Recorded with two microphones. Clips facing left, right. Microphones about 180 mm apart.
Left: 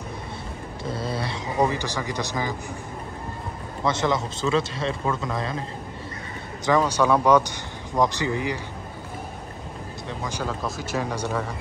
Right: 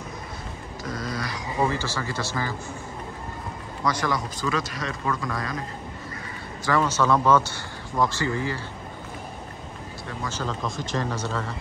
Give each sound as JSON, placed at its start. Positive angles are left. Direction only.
{"t": 0.8, "sound": "dog", "side_deg": 30}
{"t": 1.6, "sound": "speech", "side_deg": 15}
{"t": 3.8, "sound": "speech", "side_deg": 25}
{"t": 6.6, "sound": "speech", "side_deg": 15}
{"t": 10.0, "sound": "speech", "side_deg": 15}